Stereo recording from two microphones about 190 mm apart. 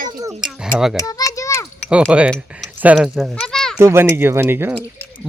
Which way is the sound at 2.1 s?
Centre (ahead or behind).